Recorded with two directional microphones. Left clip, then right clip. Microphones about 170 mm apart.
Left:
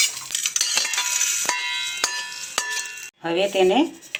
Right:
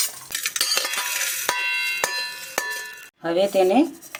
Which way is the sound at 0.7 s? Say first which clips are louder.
Left 1 dB; centre (ahead or behind).